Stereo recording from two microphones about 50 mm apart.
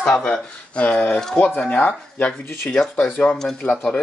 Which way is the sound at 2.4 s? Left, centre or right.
Left.